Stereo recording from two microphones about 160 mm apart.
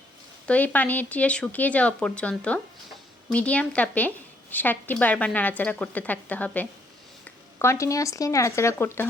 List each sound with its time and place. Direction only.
0.4 s speech: 10° left (ahead or behind)